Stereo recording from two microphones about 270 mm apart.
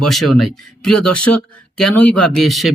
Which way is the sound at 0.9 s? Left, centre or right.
Left.